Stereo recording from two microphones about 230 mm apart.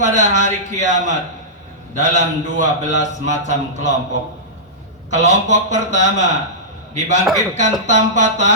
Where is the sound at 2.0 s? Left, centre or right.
Right.